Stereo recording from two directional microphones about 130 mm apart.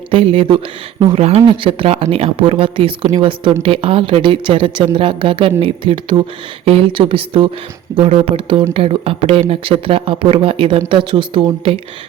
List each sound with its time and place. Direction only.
0.1 s a woman's voice: 45° right (ahead or behind)